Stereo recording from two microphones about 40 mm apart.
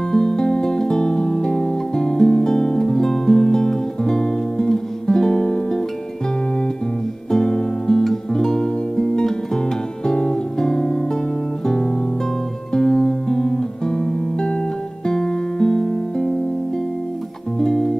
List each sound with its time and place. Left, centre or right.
0.1 s music: centre
7.2 s music: centre
10.0 s guitar: left
11.6 s music: centre
17.6 s music: centre